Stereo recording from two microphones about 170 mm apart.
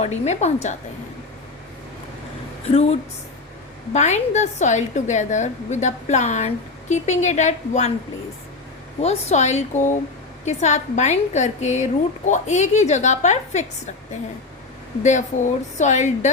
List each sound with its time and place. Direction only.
0.0 s a woman's voice: 40° left (ahead or behind)
2.6 s a woman's voice: 35° left (ahead or behind)
9.0 s a woman's voice: 40° left (ahead or behind)
15.0 s a woman's voice: 45° left (ahead or behind)